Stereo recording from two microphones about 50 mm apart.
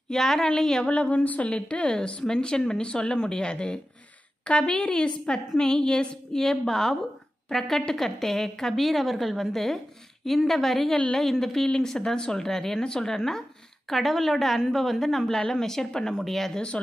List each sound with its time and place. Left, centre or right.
0.1 s speech: centre
0.8 s a woman's voice: left
1.9 s a woman's voice: centre